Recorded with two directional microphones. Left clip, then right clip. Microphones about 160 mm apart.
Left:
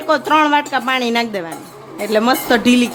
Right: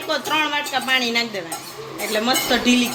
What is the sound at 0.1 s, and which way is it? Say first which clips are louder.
A woman's voice: left 8 dB; 90° left.